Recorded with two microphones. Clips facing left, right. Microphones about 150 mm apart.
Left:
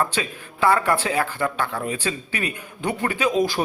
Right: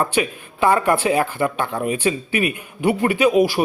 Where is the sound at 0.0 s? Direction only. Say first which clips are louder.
Right 4 dB; 15° right (ahead or behind).